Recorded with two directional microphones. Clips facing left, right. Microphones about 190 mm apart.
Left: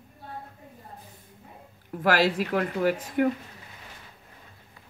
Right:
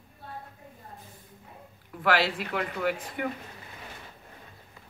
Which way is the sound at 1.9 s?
45° left (ahead or behind).